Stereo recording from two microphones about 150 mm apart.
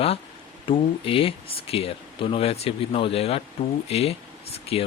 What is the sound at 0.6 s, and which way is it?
Speech, 35° left (ahead or behind).